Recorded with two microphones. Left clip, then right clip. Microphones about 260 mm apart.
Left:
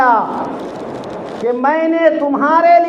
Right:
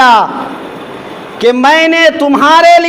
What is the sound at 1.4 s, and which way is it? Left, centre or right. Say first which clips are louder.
A man's voice: right 8 dB; right.